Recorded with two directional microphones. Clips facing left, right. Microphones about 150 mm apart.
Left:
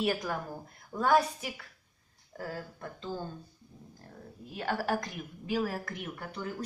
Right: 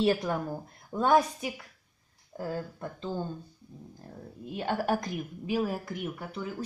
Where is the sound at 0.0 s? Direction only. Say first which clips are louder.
Right 5 dB; 25° right (ahead or behind).